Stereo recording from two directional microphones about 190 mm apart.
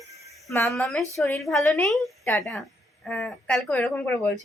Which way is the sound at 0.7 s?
Centre (ahead or behind).